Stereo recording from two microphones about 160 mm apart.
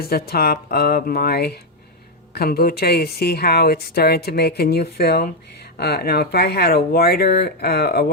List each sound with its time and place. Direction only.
0.0 s speech: 70° left (ahead or behind)